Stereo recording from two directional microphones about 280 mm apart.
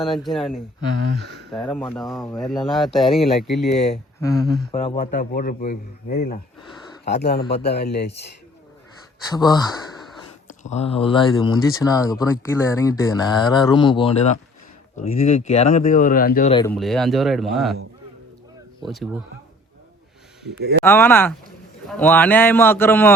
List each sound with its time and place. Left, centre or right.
0.0 s speech: centre
1.0 s speech: right
1.5 s speech: centre
2.0 s speech: centre
3.9 s speech: centre
4.4 s speech: centre
4.7 s speech: left
9.3 s speech: centre; by 16.5 s left
16.5 s speech: centre
16.7 s speech: centre
18.8 s speech: centre
20.8 s speech: centre